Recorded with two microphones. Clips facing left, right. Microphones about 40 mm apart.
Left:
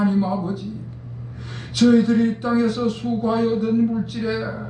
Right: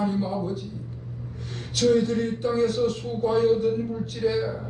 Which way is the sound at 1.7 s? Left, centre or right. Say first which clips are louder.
Left 6 dB; left.